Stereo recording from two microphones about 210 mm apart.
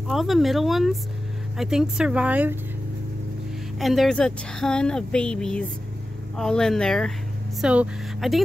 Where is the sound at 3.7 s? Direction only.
Centre (ahead or behind).